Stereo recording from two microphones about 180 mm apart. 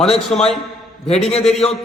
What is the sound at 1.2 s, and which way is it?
Speech, 35° left (ahead or behind).